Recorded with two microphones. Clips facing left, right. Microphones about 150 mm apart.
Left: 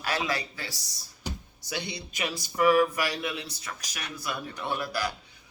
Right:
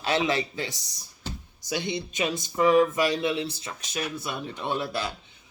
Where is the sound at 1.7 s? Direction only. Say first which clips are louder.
Right 6 dB; 20° right (ahead or behind).